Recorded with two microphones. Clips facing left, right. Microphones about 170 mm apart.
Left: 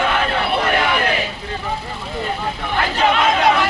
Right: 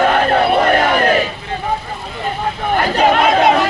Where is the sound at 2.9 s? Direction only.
40° right (ahead or behind).